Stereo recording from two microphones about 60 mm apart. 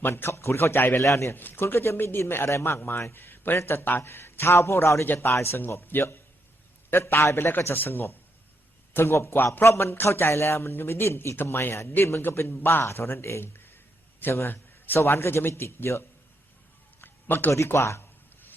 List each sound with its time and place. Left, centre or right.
0.0 s a man's voice: left
1.0 s a man's voice: left
1.3 s a man's voice: left
3.6 s a man's voice: left
5.0 s a man's voice: left
5.3 s a man's voice: left
6.9 s a man's voice: left
12.2 s a man's voice: left
17.0 s a sound: left
17.7 s a man's voice: left